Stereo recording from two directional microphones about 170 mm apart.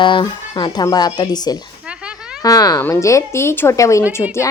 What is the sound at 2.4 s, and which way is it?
Speech, 20° left (ahead or behind).